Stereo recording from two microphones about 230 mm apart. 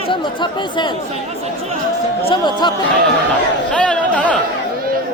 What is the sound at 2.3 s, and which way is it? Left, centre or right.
Speech, centre.